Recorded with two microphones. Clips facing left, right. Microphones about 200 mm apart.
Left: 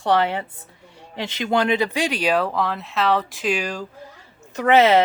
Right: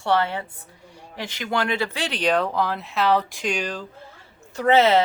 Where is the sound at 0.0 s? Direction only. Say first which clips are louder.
Left 2 dB; 15° left (ahead or behind).